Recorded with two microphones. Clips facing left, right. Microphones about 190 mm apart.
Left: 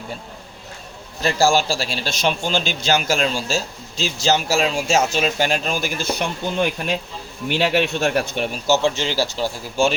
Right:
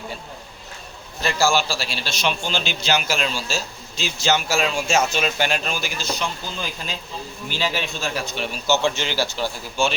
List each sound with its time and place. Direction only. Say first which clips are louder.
1.2 s a man's voice: left 3 dB; 45° left (ahead or behind)
8.8 s speech: left 2 dB; 35° left (ahead or behind)